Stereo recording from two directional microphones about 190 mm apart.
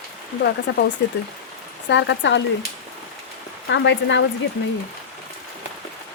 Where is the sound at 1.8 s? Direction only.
70° left (ahead or behind).